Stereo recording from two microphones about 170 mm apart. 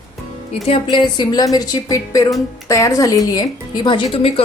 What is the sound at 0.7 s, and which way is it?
A woman's voice, 25° left (ahead or behind).